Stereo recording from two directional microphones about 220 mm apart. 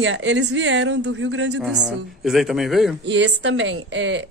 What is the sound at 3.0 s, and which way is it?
A woman's voice, 55° right (ahead or behind).